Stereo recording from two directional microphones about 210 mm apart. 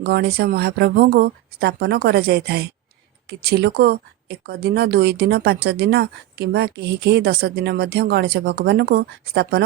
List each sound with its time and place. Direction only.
0.0 s a woman's voice: 50° right (ahead or behind)